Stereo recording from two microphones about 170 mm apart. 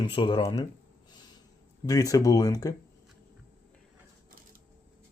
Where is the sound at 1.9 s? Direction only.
20° left (ahead or behind).